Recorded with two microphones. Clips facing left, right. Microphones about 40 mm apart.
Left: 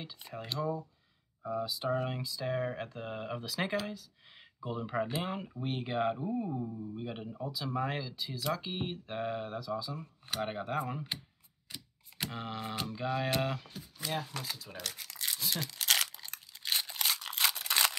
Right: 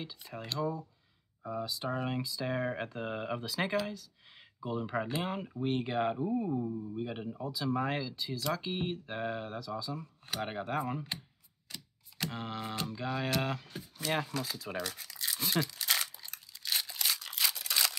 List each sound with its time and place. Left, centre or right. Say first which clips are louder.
0.3 s speech: even; centre
11.7 s a sound: even; centre
12.3 s speech: even; centre
15.0 s toothbrush: left 1 dB; left
15.3 s speech: right 5 dB; right
15.6 s crumpling: left 2 dB; left
16.2 s a sound: left 1 dB; left